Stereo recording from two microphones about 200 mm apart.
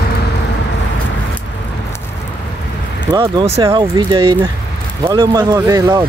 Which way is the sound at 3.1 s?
20° right (ahead or behind).